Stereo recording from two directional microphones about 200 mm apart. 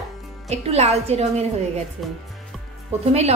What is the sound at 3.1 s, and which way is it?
Speech, 35° right (ahead or behind).